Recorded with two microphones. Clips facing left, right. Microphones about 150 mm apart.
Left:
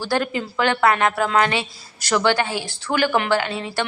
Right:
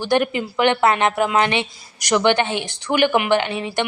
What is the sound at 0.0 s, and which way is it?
A woman's voice, 20° right (ahead or behind).